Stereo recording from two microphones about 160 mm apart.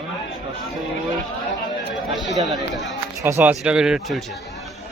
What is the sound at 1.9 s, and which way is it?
Speech, centre (ahead or behind).